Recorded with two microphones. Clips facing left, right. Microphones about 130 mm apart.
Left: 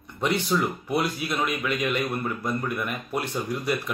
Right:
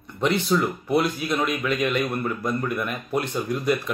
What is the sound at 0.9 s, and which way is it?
Speech, 45° right (ahead or behind).